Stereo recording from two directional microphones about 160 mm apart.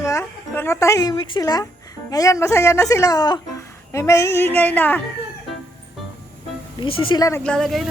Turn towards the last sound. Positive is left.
turn(degrees=0)  # may be behind; listen again after turning